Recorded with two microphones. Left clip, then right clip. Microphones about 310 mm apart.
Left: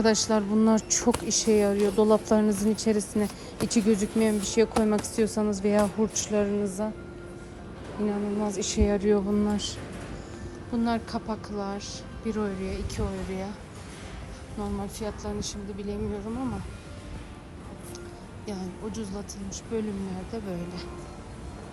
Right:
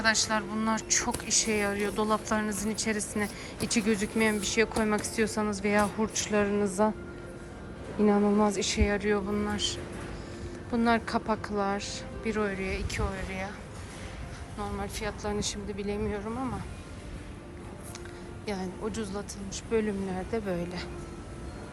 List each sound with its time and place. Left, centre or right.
0.0 s speech: left
8.0 s speech: centre
14.6 s speech: centre
18.4 s speech: centre